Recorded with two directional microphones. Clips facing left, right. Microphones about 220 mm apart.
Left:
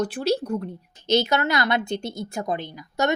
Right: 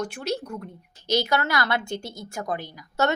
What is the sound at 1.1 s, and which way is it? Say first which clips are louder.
A woman's voice: left 3 dB; 20° left (ahead or behind).